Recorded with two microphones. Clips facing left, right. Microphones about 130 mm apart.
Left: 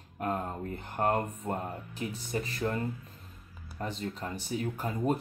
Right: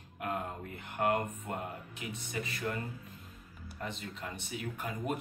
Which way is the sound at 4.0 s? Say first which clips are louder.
Left 6 dB; 35° left (ahead or behind).